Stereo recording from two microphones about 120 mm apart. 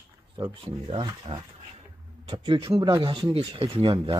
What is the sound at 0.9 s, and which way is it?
Speech, 45° right (ahead or behind).